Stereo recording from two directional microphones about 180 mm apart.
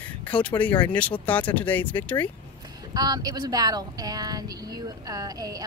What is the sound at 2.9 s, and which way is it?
Speech, 20° right (ahead or behind).